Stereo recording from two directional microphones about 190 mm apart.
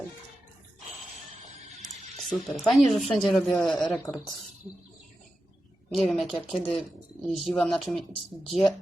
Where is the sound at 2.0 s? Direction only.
35° right (ahead or behind).